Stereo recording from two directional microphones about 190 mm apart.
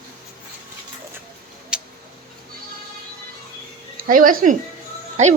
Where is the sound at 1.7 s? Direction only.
5° right (ahead or behind).